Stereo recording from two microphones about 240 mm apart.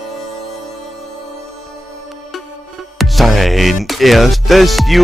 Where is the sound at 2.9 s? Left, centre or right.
Centre.